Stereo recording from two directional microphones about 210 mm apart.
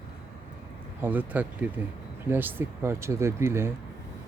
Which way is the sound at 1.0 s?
10° right (ahead or behind).